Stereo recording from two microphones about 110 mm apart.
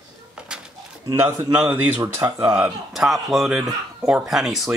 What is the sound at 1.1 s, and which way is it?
A man's voice, 20° right (ahead or behind).